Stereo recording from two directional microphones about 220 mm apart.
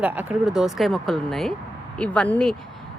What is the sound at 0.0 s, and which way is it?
A woman's voice, 5° right (ahead or behind).